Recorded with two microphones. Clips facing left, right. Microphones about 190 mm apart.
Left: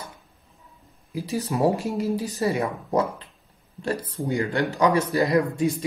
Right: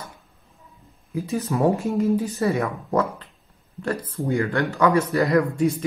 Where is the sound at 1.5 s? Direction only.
20° left (ahead or behind).